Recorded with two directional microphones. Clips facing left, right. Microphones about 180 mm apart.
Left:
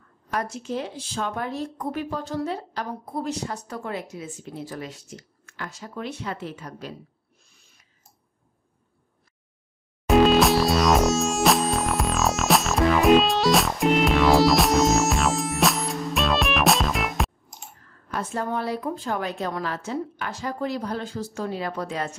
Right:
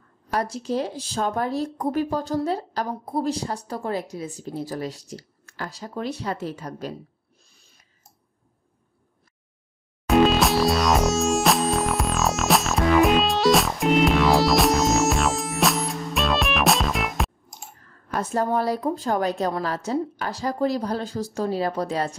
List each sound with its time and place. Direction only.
0.3 s speech: 35° right (ahead or behind)
10.0 s music: centre (ahead or behind)
18.1 s speech: 40° right (ahead or behind)